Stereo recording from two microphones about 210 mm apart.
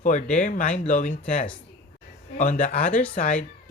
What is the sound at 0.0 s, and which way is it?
Speech, 35° left (ahead or behind).